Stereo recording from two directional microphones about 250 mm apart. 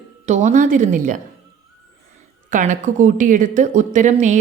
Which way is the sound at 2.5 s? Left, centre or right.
Right.